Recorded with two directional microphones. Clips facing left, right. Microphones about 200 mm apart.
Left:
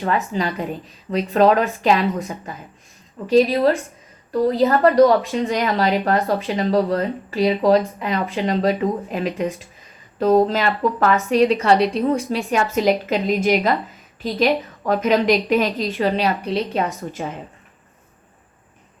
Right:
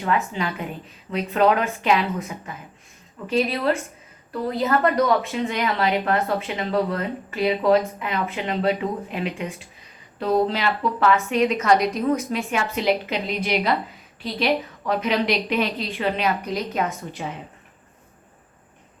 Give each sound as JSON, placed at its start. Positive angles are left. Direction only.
{"t": 0.0, "sound": "a woman's voice", "side_deg": 35}
{"t": 3.2, "sound": "a woman's voice", "side_deg": 35}
{"t": 17.1, "sound": "a woman's voice", "side_deg": 45}